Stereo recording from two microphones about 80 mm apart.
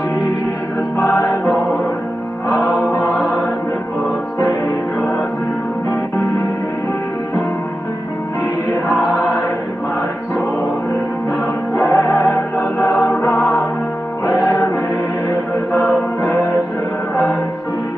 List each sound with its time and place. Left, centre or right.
0.9 s choir: left
11.7 s music: left
12.9 s music: centre
15.7 s music: left